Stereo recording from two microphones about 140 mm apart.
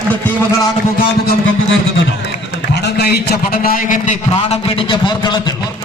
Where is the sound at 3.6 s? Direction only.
70° left (ahead or behind).